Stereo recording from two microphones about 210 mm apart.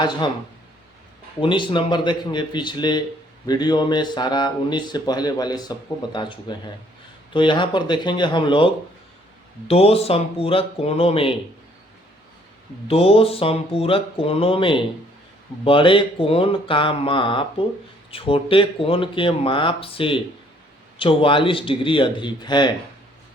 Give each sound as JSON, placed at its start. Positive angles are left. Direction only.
{"t": 1.4, "sound": "a man's voice", "side_deg": 25}
{"t": 12.9, "sound": "a man's voice", "side_deg": 30}